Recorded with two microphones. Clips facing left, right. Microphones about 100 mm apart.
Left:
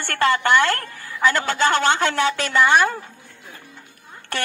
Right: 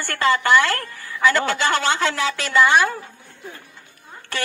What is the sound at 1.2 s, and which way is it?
Speech, 45° left (ahead or behind).